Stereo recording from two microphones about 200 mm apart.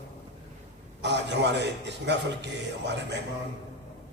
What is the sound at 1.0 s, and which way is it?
A man's voice, 60° right (ahead or behind).